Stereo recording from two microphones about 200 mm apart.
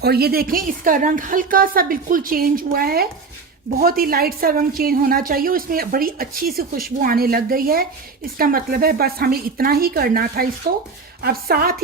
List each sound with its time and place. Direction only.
0.0 s a woman's voice: 50° right (ahead or behind)